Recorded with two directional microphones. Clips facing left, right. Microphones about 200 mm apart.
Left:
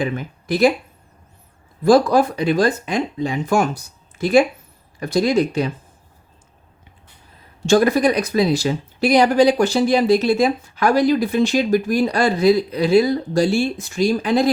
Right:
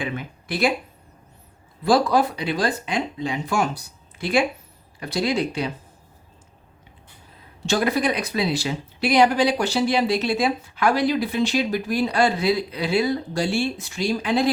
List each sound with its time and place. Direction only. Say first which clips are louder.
0.0 s speech: left 6 dB; 40° left (ahead or behind)
1.8 s speech: left 5 dB; 45° left (ahead or behind)
7.7 s speech: left 7 dB; 45° left (ahead or behind)